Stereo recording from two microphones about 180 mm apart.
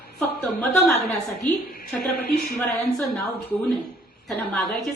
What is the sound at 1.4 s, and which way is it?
Speech, 50° left (ahead or behind).